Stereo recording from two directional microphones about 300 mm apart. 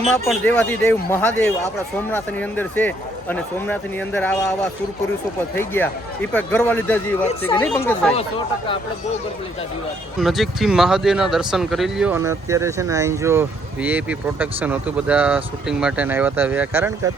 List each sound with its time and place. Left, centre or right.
0.3 s speech: centre
5.5 s speech: centre
10.2 s speech: centre